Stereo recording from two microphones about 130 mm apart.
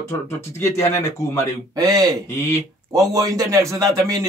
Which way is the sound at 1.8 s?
25° right (ahead or behind).